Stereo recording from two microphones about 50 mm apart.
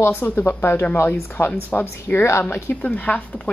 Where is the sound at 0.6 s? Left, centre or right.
Left.